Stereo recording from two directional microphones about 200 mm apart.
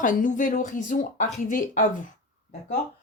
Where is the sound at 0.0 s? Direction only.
40° left (ahead or behind).